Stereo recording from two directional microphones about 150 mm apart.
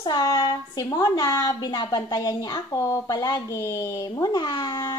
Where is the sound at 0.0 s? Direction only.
25° left (ahead or behind).